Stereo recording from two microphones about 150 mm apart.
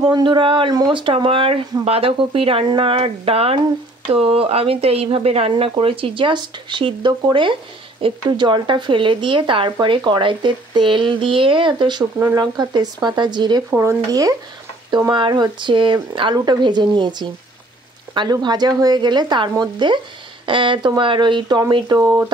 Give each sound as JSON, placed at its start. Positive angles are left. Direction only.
{"t": 0.0, "sound": "speech", "side_deg": -30}
{"t": 13.7, "sound": "speech", "side_deg": -15}